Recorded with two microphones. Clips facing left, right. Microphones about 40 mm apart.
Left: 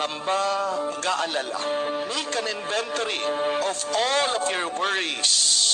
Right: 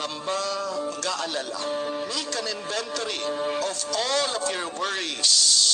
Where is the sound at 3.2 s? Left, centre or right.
Left.